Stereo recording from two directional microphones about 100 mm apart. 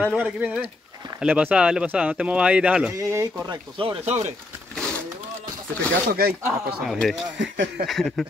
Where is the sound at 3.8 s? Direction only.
65° right (ahead or behind).